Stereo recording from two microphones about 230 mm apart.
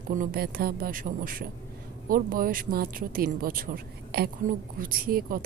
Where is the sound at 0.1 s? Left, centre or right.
Right.